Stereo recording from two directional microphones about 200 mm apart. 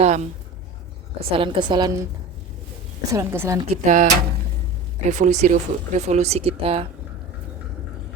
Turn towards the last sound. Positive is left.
turn(degrees=-30)  # may be behind; listen again after turning